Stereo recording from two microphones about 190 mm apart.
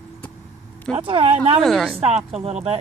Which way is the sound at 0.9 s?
30° right (ahead or behind).